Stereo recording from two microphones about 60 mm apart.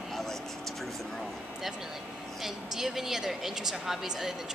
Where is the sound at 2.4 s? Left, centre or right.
Centre.